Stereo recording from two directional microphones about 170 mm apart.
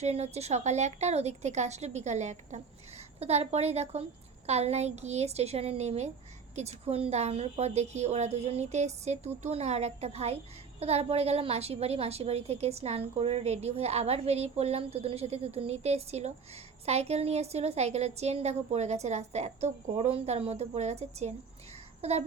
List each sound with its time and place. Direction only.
0.0 s a woman's voice: 40° right (ahead or behind)